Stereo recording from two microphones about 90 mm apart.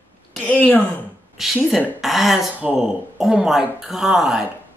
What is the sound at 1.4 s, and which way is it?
Speech, 5° right (ahead or behind).